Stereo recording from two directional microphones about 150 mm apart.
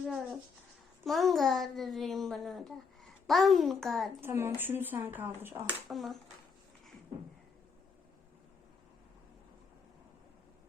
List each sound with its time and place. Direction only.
0.0 s a sound: 5° right (ahead or behind)
1.0 s a child's voice: centre (ahead or behind)
4.2 s speech: 15° right (ahead or behind)
5.9 s a child's voice: centre (ahead or behind)